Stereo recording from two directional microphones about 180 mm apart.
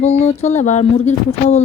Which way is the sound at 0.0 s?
40° left (ahead or behind).